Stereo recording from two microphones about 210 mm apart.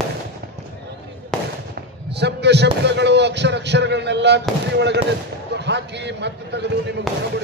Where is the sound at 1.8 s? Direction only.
55° right (ahead or behind).